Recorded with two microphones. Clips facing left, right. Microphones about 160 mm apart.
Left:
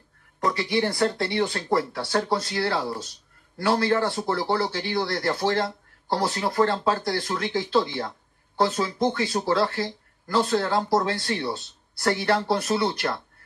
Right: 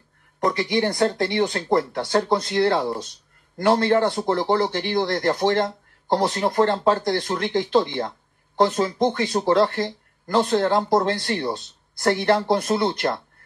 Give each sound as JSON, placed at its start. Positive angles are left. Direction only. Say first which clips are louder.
{"t": 0.4, "sound": "speech", "louder": "right 3 dB", "side_deg": -20}